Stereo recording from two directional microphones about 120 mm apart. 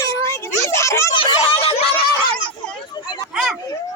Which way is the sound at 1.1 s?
45° left (ahead or behind).